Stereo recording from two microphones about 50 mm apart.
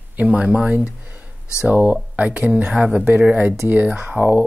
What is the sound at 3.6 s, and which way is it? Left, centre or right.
Speech, right.